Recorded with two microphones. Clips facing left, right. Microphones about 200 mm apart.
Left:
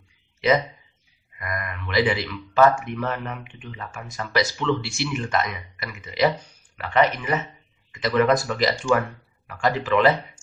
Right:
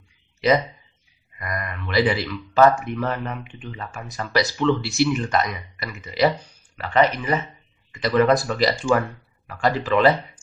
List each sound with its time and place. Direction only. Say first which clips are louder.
1.4 s speech: right 1 dB; 35° right (ahead or behind)